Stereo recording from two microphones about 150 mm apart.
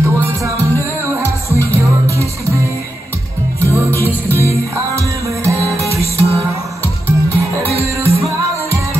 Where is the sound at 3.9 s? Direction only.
15° left (ahead or behind).